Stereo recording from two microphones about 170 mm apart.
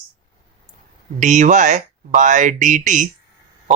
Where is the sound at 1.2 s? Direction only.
45° right (ahead or behind).